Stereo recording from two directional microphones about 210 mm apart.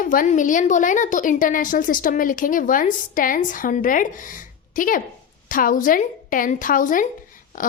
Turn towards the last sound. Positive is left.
turn(degrees=40)  # may be behind; listen again after turning